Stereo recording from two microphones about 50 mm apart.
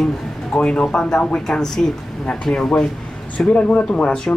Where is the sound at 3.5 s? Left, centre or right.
Left.